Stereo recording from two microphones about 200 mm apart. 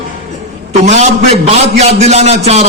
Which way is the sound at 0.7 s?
35° right (ahead or behind).